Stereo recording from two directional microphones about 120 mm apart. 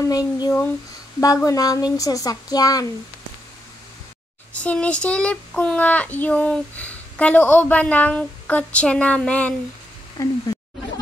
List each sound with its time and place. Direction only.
0.0 s speech: 30° left (ahead or behind)
4.6 s speech: 10° left (ahead or behind)
10.2 s speech: 25° left (ahead or behind)